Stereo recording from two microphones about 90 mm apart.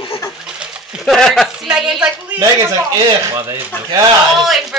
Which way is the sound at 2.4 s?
40° right (ahead or behind).